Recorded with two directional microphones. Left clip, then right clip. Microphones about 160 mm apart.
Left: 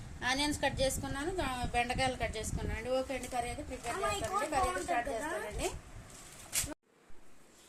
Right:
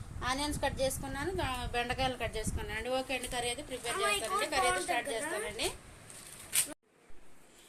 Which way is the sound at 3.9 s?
15° left (ahead or behind).